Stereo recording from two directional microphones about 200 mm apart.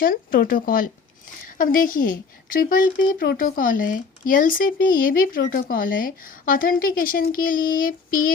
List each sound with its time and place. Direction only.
0.0 s a woman's voice: 45° left (ahead or behind)